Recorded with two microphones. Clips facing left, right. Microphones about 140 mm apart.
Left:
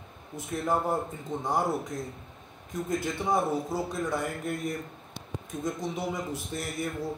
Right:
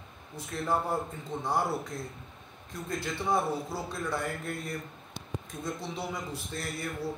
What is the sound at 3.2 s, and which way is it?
Speech, 15° left (ahead or behind).